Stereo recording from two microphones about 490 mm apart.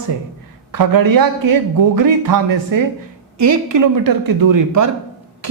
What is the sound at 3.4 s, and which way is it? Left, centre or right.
Speech, right.